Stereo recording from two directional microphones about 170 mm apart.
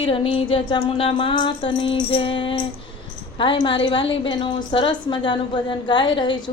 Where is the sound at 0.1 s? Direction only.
30° left (ahead or behind).